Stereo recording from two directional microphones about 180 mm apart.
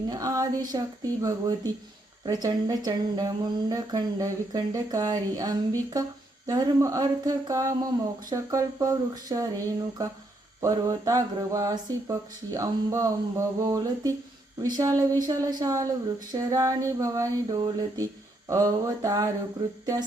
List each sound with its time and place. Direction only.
0.1 s a woman's voice: 20° right (ahead or behind)
1.2 s mantra: 20° right (ahead or behind)
8.3 s speech: 20° right (ahead or behind)
10.0 s mantra: 20° right (ahead or behind)
14.6 s speech: 20° right (ahead or behind)
15.3 s mantra: 20° right (ahead or behind)
19.8 s speech: 20° right (ahead or behind)